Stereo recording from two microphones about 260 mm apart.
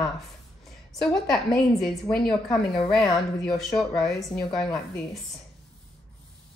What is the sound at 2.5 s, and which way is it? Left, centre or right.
Speech, centre.